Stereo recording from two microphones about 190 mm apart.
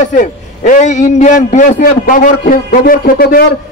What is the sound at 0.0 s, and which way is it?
A man's voice, 40° left (ahead or behind).